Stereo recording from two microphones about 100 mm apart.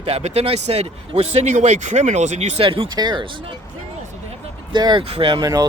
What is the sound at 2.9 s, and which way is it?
Speech, 45° right (ahead or behind).